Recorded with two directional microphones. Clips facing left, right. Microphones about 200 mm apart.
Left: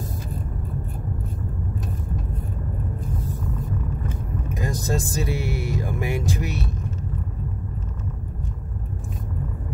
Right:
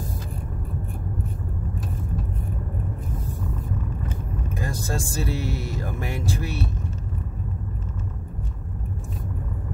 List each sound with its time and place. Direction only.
4.5 s speech: 15° left (ahead or behind)